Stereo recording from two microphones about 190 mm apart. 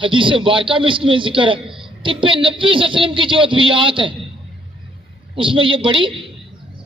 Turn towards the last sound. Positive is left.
turn(degrees=-25)  # may be behind; listen again after turning